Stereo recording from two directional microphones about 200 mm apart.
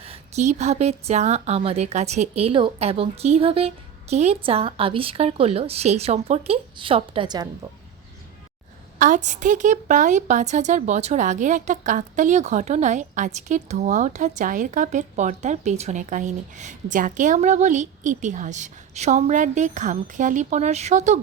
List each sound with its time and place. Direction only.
0.0 s a woman's voice: 30° right (ahead or behind)
9.0 s a woman's voice: 40° right (ahead or behind)